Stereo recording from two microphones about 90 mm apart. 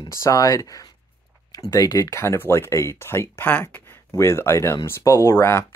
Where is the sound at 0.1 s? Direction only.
35° left (ahead or behind).